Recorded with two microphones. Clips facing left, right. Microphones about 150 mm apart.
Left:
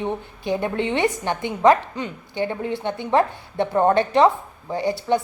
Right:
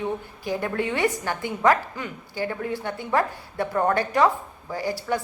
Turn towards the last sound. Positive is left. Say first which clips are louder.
# left 5 dB
turn(degrees=25)  # may be behind; listen again after turning